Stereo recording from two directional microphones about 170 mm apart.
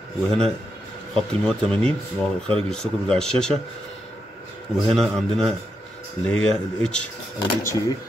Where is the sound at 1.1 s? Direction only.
5° left (ahead or behind).